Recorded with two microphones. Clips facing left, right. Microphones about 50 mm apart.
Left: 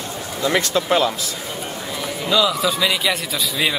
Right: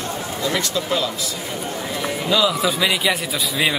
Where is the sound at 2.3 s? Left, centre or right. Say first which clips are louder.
Left 1 dB; centre.